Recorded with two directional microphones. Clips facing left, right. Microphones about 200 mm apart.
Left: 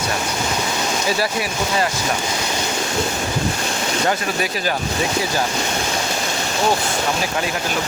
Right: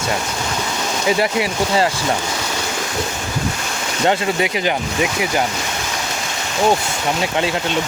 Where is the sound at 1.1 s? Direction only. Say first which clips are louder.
Right 7 dB; 20° right (ahead or behind).